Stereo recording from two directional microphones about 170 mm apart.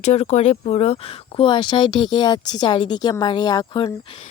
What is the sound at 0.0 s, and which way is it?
Speech, 40° left (ahead or behind).